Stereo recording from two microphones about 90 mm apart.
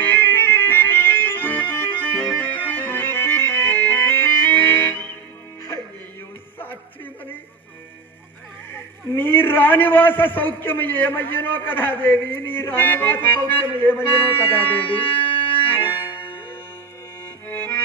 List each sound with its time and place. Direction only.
0.0 s music: 25° left (ahead or behind)
8.7 s a man's voice: 25° left (ahead or behind)
15.6 s music: 20° left (ahead or behind)
17.5 s music: 25° left (ahead or behind)